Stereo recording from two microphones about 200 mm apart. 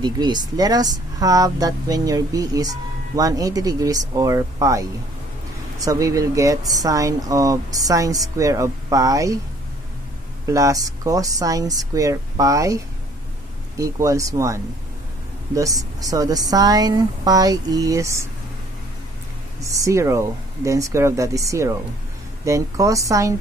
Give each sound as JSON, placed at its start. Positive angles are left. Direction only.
{"t": 0.0, "sound": "speech", "side_deg": -20}
{"t": 10.4, "sound": "speech", "side_deg": -15}
{"t": 19.6, "sound": "speech", "side_deg": -15}